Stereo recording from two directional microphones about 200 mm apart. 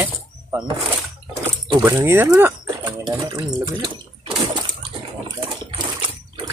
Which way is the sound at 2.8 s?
20° right (ahead or behind).